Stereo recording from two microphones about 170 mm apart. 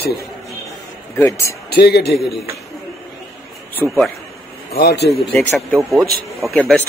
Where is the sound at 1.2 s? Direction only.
20° left (ahead or behind).